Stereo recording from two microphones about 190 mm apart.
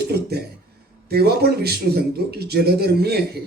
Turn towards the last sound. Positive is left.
turn(degrees=-55)  # may be behind; listen again after turning